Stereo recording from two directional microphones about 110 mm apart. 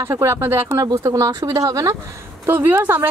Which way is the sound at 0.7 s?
35° right (ahead or behind).